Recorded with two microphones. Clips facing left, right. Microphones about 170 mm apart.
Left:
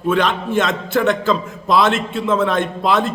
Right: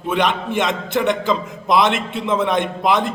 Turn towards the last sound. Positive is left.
turn(degrees=-15)  # may be behind; listen again after turning